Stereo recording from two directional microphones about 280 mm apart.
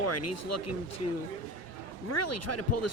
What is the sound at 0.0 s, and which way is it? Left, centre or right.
Speech, left.